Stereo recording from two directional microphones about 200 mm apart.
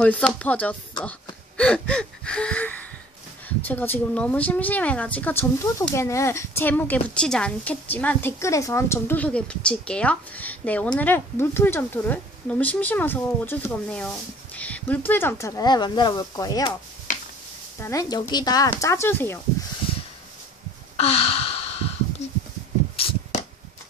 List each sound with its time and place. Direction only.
0.0 s speech: 5° left (ahead or behind)
1.6 s gasp: 5° left (ahead or behind)
3.4 s speech: 10° left (ahead or behind)
17.8 s speech: 15° left (ahead or behind)
20.9 s gasp: 30° left (ahead or behind)
22.9 s a sound: 30° left (ahead or behind)